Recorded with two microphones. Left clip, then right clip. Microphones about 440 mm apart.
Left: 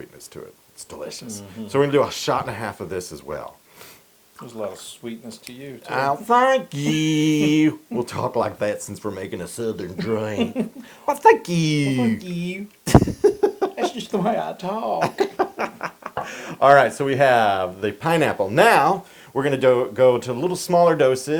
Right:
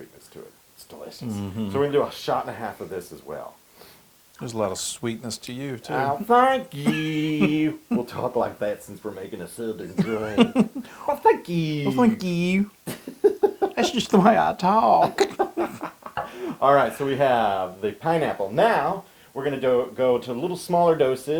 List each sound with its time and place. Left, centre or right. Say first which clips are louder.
1.7 s speech: left 4 dB; left
4.4 s speech: right 4 dB; right
5.9 s speech: left 2 dB; left
10.3 s speech: right 4 dB; right
11.0 s speech: left 5 dB; left
12.2 s speech: right 5 dB; right
12.8 s a sound: left 7 dB; left
13.7 s speech: right 3 dB; right
15.4 s a sound: left 2 dB; left
16.6 s speech: left 5 dB; centre
18.1 s speech: left 4 dB; left